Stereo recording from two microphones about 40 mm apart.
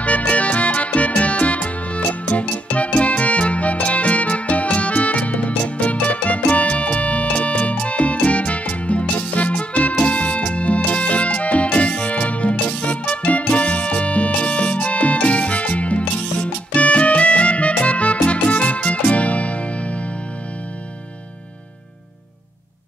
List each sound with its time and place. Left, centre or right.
0.0 s music: left